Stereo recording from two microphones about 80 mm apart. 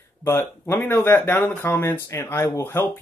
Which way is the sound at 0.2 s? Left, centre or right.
Left.